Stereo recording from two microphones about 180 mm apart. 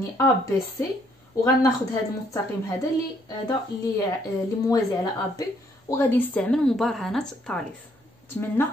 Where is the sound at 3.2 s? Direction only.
20° left (ahead or behind).